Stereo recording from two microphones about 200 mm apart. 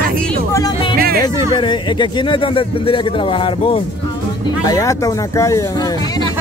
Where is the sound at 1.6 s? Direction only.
25° left (ahead or behind).